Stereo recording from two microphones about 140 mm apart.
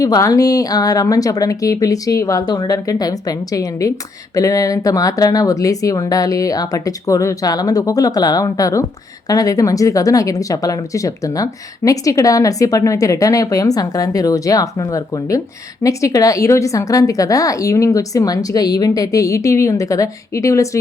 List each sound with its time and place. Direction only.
0.0 s speech: 25° left (ahead or behind)